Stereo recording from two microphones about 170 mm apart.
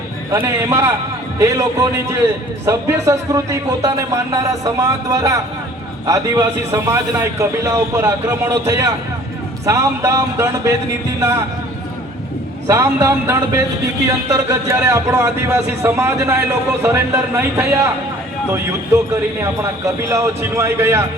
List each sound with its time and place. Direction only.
0.3 s a man's voice: 15° right (ahead or behind)
12.6 s speech: 15° right (ahead or behind)
19.1 s speech: 15° right (ahead or behind)